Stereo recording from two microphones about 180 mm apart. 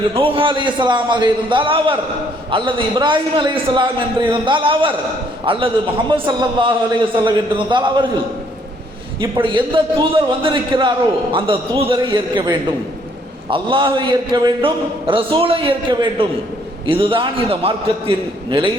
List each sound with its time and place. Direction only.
0.1 s a man's voice: 30° right (ahead or behind)
9.2 s a man's voice: 25° right (ahead or behind)